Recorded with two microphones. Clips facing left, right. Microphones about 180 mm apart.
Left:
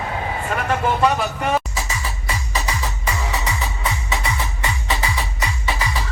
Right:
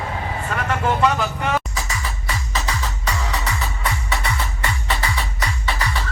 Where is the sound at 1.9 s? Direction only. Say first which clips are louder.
Left 1 dB; 15° left (ahead or behind).